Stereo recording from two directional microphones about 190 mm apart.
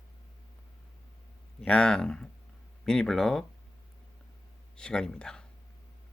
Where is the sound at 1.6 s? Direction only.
5° left (ahead or behind).